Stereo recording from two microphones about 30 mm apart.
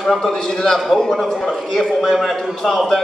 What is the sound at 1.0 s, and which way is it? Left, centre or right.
A man's voice, centre.